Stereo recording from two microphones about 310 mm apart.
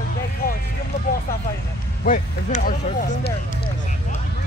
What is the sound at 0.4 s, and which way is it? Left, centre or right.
Vehicle, left.